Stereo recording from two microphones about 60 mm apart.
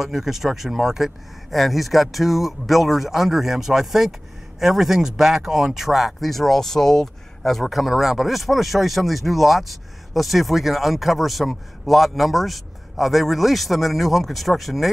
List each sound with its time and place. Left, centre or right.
0.0 s speech: centre